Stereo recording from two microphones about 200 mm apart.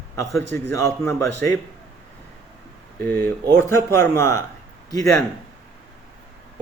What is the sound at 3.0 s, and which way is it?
A man's voice, 10° left (ahead or behind).